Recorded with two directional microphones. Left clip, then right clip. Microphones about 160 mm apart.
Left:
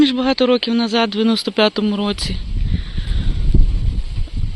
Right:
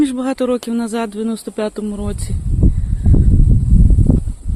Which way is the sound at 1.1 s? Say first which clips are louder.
Left 5 dB; 5° left (ahead or behind).